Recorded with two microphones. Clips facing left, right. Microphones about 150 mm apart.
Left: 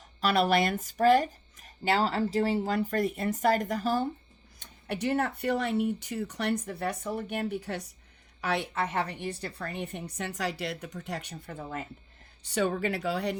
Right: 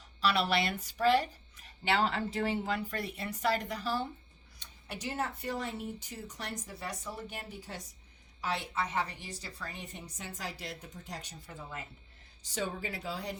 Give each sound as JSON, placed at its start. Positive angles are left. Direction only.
{"t": 0.2, "sound": "speech", "side_deg": 45}
{"t": 4.6, "sound": "a woman's voice", "side_deg": 60}
{"t": 12.4, "sound": "speech", "side_deg": 65}